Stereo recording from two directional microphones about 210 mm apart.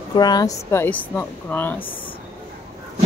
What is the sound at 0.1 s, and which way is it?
A woman's voice, 20° left (ahead or behind).